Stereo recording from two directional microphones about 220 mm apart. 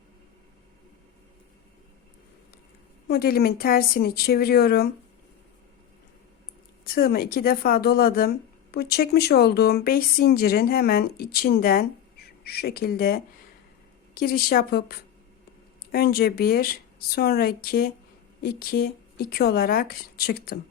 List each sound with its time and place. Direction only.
3.1 s speech: 45° left (ahead or behind)
6.8 s speech: 40° left (ahead or behind)